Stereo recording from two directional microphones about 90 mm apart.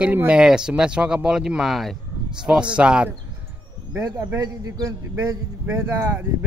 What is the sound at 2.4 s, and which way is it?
Speech, 10° right (ahead or behind).